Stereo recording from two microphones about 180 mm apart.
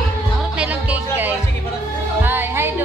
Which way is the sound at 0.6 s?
10° right (ahead or behind).